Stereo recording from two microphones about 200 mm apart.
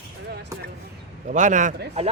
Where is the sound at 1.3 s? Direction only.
40° right (ahead or behind).